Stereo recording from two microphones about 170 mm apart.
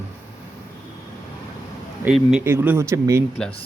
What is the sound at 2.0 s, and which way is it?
A man's voice, 5° right (ahead or behind).